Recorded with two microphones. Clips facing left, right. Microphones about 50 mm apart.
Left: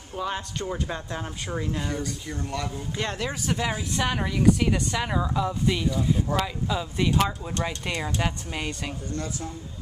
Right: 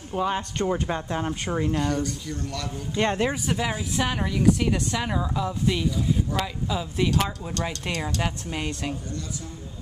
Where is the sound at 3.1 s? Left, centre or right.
Right.